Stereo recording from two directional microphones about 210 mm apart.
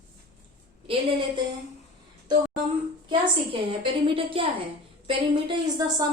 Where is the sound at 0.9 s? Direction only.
25° right (ahead or behind).